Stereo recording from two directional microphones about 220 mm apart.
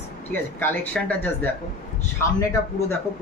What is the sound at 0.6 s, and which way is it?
Speech, 5° left (ahead or behind).